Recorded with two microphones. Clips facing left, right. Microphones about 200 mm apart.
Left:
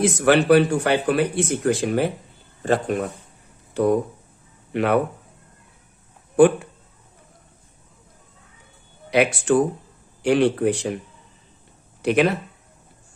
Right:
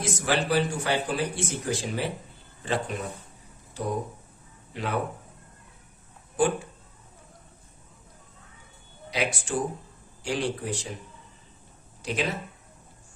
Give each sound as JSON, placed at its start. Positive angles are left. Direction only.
{"t": 0.0, "sound": "speech", "side_deg": 65}
{"t": 6.3, "sound": "speech", "side_deg": 65}
{"t": 9.0, "sound": "speech", "side_deg": 60}
{"t": 12.0, "sound": "speech", "side_deg": 65}